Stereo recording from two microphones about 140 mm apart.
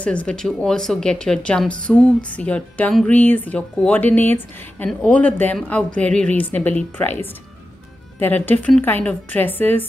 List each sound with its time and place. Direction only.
0.0 s a woman's voice: 10° left (ahead or behind)
1.9 s music: 5° left (ahead or behind)